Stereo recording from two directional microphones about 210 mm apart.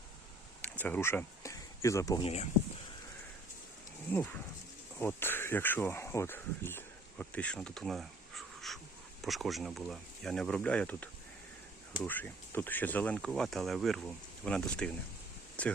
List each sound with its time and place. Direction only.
0.6 s a sound: 5° left (ahead or behind)
2.2 s speech: 30° left (ahead or behind)
4.9 s speech: 10° left (ahead or behind)